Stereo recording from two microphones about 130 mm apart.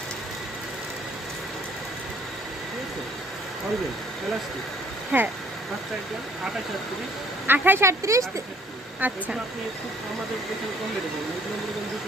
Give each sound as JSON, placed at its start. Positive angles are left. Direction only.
{"t": 5.1, "sound": "speech", "side_deg": -10}
{"t": 7.4, "sound": "speech", "side_deg": -15}